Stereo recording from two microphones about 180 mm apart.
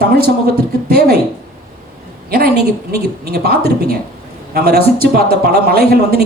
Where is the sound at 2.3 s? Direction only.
60° right (ahead or behind).